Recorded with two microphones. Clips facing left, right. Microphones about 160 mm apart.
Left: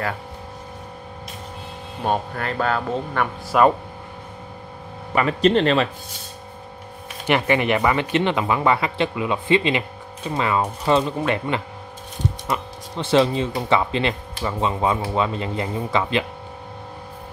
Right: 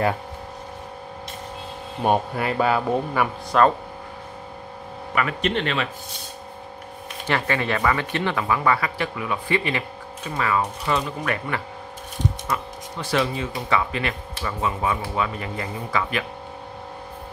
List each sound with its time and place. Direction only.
2.0 s a man's voice: 10° right (ahead or behind)
3.5 s speech: 10° left (ahead or behind)
5.1 s speech: 30° left (ahead or behind)
7.2 s speech: 15° left (ahead or behind)